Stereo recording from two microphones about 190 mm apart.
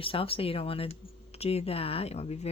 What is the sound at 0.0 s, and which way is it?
Speech, 30° left (ahead or behind).